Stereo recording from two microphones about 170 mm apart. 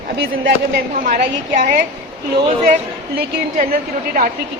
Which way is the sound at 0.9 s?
50° right (ahead or behind).